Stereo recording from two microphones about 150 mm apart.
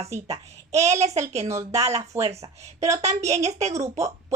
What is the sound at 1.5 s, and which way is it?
Speech, 20° right (ahead or behind).